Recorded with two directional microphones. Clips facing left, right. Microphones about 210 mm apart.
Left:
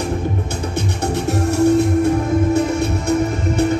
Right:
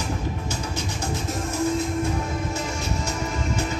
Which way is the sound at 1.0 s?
70° left (ahead or behind).